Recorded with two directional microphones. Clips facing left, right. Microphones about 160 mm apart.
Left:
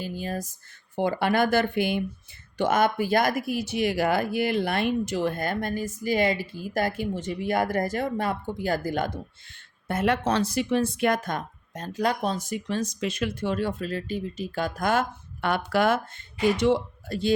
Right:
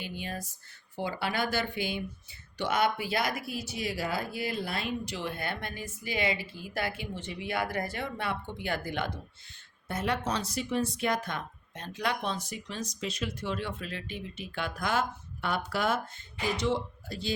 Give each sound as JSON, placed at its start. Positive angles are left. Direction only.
{"t": 0.0, "sound": "speech", "side_deg": 40}
{"t": 0.9, "sound": "speech", "side_deg": 50}
{"t": 9.9, "sound": "speech", "side_deg": 55}